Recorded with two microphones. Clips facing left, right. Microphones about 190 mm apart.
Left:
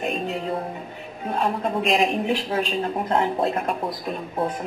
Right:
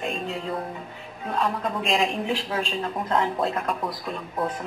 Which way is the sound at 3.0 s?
20° left (ahead or behind).